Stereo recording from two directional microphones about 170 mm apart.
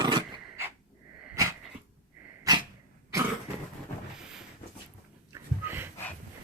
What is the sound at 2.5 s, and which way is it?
Dog, 20° right (ahead or behind).